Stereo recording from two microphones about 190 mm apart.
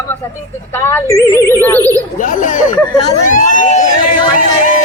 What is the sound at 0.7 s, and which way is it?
Speech, 15° left (ahead or behind).